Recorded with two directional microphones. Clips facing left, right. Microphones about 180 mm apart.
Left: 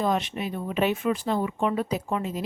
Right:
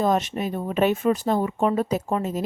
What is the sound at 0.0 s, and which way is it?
Speech, 45° right (ahead or behind).